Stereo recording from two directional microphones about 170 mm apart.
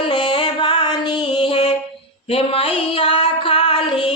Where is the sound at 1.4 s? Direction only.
35° left (ahead or behind).